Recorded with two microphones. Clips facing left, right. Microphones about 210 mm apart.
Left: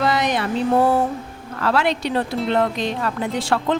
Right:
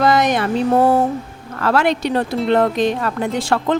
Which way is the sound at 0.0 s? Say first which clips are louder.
Right 5 dB; 45° right (ahead or behind).